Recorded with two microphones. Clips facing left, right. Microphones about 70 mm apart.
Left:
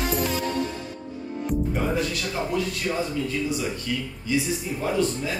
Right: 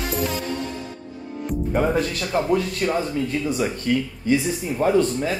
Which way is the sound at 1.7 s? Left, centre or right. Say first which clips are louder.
Right 4 dB; right.